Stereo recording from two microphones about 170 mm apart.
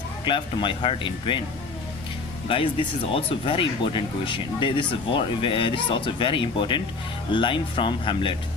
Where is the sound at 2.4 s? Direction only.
30° left (ahead or behind).